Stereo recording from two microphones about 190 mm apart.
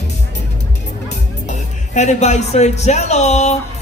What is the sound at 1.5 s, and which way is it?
Speech, 40° left (ahead or behind).